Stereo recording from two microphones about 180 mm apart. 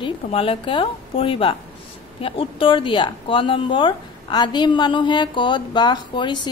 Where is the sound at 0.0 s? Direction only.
30° left (ahead or behind).